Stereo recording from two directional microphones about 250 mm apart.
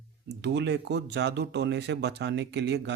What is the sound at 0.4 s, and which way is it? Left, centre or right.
Speech, right.